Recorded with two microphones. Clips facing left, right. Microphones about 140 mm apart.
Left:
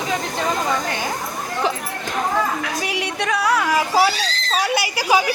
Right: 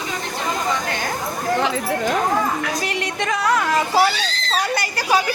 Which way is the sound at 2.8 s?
5° left (ahead or behind).